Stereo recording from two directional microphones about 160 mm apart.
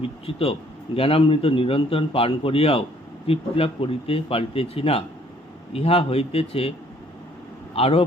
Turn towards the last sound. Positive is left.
turn(degrees=40)  # may be behind; listen again after turning